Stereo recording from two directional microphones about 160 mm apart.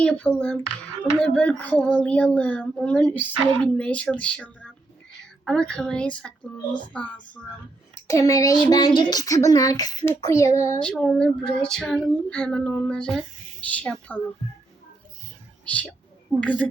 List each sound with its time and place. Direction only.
0.0 s speech: 5° left (ahead or behind)
8.0 s speech: 20° left (ahead or behind)
10.9 s female singing: centre (ahead or behind)
13.7 s speech: 5° left (ahead or behind)
15.6 s speech: 10° left (ahead or behind)